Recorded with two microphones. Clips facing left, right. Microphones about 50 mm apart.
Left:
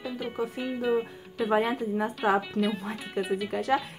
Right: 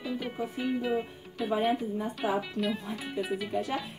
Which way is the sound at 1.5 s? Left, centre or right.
Left.